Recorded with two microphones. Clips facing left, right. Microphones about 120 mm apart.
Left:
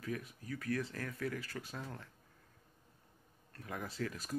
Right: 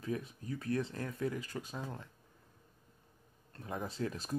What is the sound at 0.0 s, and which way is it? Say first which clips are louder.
Speech: right 3 dB; 25° right (ahead or behind).